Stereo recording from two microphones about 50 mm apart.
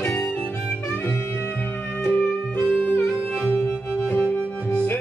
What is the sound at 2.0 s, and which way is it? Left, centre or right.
Music, left.